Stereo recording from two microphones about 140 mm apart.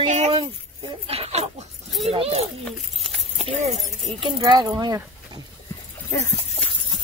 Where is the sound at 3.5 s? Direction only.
55° right (ahead or behind).